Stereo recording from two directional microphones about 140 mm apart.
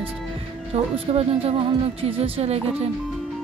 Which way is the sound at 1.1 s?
45° right (ahead or behind).